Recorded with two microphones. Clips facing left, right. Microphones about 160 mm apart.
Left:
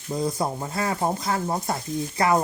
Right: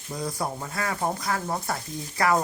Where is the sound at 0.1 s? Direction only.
20° left (ahead or behind).